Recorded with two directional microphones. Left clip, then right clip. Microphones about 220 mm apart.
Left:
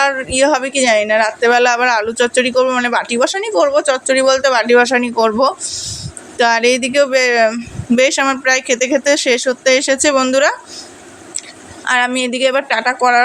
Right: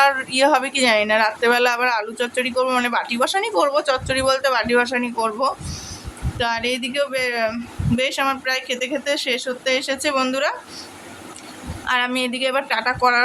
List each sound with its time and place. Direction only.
0.0 s speech: 10° left (ahead or behind)
11.9 s speech: 20° left (ahead or behind)